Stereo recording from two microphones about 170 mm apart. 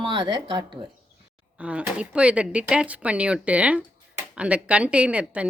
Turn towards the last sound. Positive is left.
turn(degrees=-5)  # may be behind; listen again after turning